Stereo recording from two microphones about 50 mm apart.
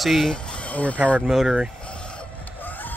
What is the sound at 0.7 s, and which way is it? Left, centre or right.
Speech, left.